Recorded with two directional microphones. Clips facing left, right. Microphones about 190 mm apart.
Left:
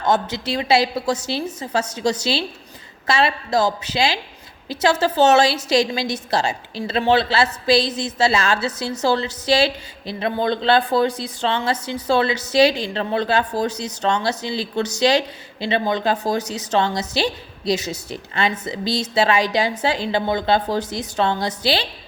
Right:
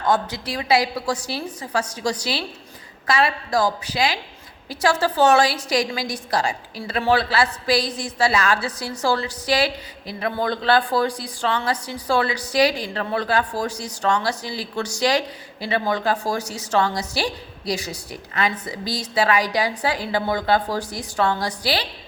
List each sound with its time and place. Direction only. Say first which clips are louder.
0.0 s a woman's voice: left 1 dB; 25° left (ahead or behind)